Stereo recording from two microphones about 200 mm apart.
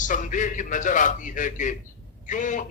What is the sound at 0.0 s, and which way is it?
A man's voice, 40° left (ahead or behind).